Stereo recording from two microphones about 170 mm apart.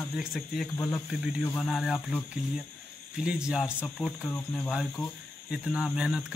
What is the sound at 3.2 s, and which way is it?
Speech, 5° right (ahead or behind).